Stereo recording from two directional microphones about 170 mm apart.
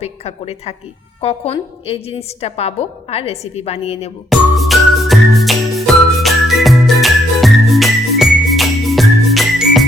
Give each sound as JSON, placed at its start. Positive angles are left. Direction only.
{"t": 0.0, "sound": "a woman's voice", "side_deg": 35}
{"t": 4.3, "sound": "music", "side_deg": 0}